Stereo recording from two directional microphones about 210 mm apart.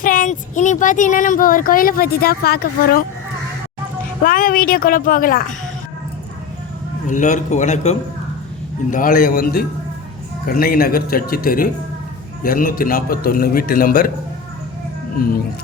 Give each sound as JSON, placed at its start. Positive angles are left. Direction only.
{"t": 0.0, "sound": "speech", "side_deg": 40}
{"t": 4.2, "sound": "a man's voice", "side_deg": 40}
{"t": 7.1, "sound": "a man's voice", "side_deg": 35}